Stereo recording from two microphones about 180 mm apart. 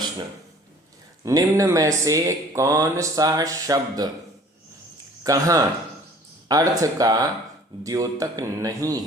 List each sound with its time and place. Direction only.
1.2 s speech: 20° right (ahead or behind)
5.2 s speech: 20° right (ahead or behind)